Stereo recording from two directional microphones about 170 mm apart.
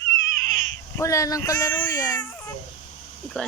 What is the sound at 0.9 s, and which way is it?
Speech, 20° left (ahead or behind).